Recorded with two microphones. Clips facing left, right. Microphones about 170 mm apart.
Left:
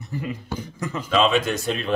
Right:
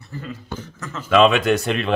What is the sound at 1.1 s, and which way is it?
Speech, 65° right (ahead or behind).